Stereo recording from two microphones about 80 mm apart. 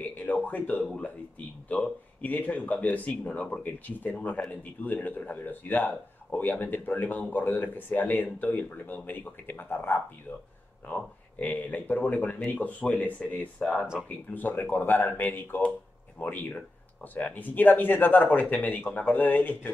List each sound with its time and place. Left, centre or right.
0.0 s speech: left